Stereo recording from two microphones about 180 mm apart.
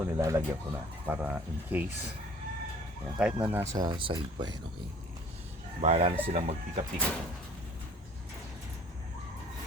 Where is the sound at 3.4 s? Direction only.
10° right (ahead or behind).